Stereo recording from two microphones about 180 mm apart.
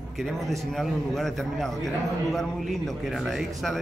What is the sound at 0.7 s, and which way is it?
A man's voice, centre (ahead or behind).